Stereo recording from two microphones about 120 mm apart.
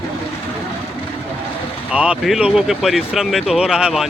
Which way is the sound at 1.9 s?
10° right (ahead or behind).